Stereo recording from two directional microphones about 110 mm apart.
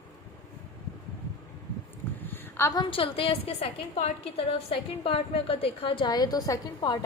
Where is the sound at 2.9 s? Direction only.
55° left (ahead or behind); by 7.0 s 35° left (ahead or behind).